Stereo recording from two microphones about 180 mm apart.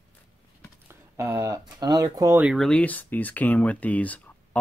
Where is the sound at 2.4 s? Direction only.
Centre (ahead or behind).